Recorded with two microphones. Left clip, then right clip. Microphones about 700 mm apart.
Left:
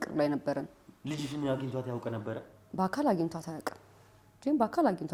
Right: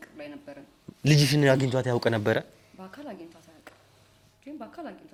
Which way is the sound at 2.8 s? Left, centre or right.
Left.